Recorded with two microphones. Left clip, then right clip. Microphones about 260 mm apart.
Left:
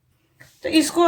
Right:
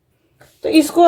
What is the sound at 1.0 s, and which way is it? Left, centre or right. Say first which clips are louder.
Speech: right 7 dB; left.